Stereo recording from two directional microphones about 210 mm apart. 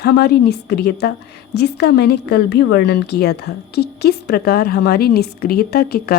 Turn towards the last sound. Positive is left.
turn(degrees=50)  # may be behind; listen again after turning